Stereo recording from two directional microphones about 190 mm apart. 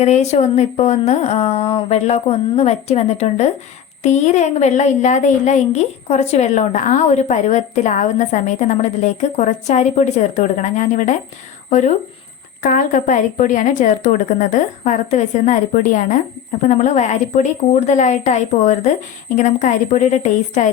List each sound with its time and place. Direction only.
0.0 s a woman's voice: 35° left (ahead or behind)